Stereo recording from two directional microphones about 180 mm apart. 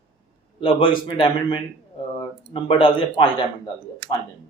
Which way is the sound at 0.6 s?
25° left (ahead or behind).